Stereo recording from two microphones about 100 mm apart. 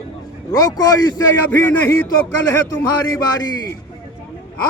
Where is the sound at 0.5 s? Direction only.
40° left (ahead or behind).